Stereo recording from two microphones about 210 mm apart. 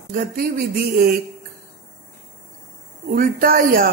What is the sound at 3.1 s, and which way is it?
Speech, 45° right (ahead or behind).